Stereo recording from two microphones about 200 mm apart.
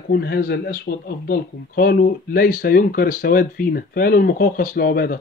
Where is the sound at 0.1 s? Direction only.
50° left (ahead or behind).